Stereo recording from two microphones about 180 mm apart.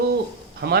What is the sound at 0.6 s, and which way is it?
Speech, 60° right (ahead or behind).